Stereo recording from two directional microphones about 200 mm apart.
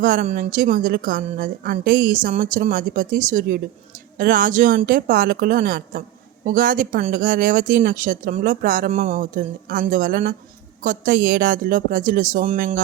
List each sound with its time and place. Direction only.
0.0 s a woman's voice: 45° right (ahead or behind)